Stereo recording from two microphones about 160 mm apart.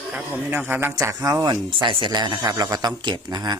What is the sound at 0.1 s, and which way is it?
Speech, 10° right (ahead or behind).